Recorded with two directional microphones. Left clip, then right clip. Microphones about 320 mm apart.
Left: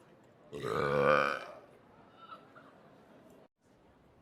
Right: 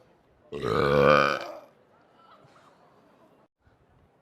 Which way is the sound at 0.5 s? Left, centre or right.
Right.